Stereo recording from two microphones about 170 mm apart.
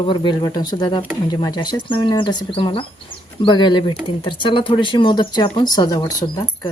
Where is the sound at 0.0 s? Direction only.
30° left (ahead or behind).